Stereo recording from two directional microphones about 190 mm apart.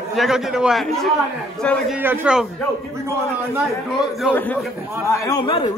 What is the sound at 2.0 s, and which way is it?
Speech, 10° right (ahead or behind).